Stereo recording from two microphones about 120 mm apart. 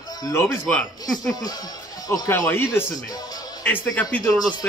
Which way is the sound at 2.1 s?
20° left (ahead or behind).